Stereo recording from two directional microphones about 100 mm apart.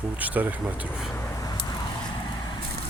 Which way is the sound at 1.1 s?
25° left (ahead or behind).